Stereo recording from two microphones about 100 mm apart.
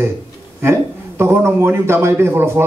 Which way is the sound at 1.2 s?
25° right (ahead or behind).